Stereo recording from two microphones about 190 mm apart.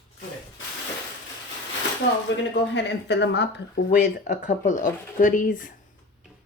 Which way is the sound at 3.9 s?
45° left (ahead or behind).